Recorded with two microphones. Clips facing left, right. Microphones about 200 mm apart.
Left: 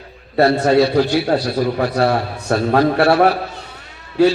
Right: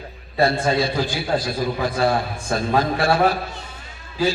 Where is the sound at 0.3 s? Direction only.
70° left (ahead or behind).